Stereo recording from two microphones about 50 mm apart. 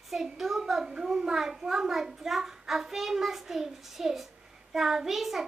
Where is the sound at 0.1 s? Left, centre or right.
Centre.